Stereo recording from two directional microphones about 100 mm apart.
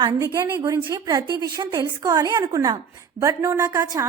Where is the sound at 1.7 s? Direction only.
30° right (ahead or behind).